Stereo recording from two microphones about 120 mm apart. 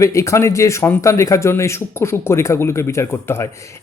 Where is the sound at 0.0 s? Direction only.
25° left (ahead or behind).